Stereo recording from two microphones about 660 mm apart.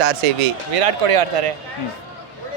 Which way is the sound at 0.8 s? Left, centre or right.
Right.